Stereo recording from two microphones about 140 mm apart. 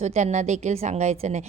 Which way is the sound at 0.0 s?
55° right (ahead or behind).